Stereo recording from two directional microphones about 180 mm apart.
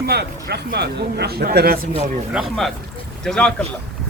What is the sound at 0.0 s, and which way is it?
Speech, 60° right (ahead or behind).